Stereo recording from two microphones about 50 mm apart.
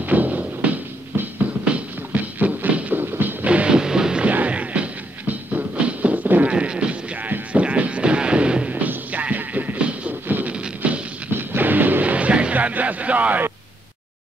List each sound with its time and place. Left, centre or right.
0.0 s music: right
2.3 s a sound: right
3.4 s music: right
4.3 s music: right
6.5 s speech: centre
7.2 s music: right
10.2 s music: right
10.5 s music: right
11.3 s music: right